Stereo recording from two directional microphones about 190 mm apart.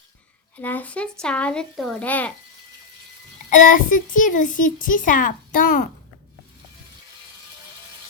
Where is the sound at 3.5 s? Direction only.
45° left (ahead or behind).